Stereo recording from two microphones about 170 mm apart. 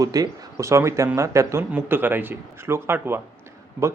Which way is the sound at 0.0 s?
20° right (ahead or behind).